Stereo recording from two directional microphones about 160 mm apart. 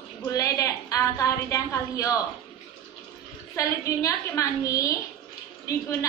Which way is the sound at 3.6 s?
20° left (ahead or behind).